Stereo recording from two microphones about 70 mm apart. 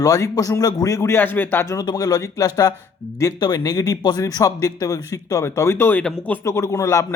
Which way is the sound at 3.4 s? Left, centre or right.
Left.